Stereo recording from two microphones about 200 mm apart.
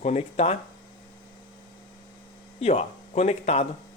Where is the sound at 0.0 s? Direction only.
35° left (ahead or behind).